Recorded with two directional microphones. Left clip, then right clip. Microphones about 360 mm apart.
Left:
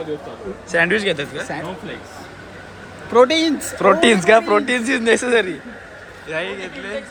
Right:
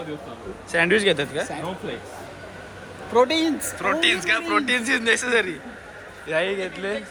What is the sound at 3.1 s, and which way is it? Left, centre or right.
Speech, left.